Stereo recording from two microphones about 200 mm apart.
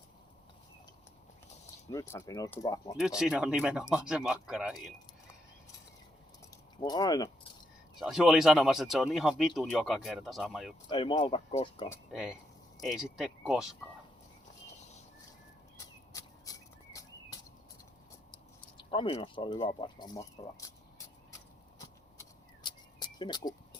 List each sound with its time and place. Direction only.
1.9 s speech: 15° left (ahead or behind)
3.2 s speech: 5° right (ahead or behind)
6.7 s speech: 20° left (ahead or behind)
7.9 s speech: centre (ahead or behind)
10.8 s speech: 25° left (ahead or behind)
12.1 s speech: 5° right (ahead or behind)
16.5 s a sound: 15° left (ahead or behind)
18.8 s speech: 25° left (ahead or behind)
22.6 s a sound: 20° left (ahead or behind)